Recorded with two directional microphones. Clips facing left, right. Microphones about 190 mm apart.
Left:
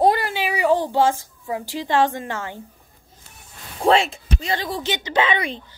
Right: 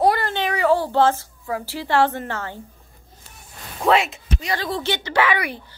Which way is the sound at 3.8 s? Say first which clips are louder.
Left 1 dB; 30° left (ahead or behind).